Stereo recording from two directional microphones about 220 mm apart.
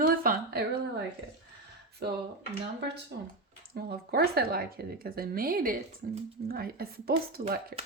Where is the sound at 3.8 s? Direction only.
45° right (ahead or behind).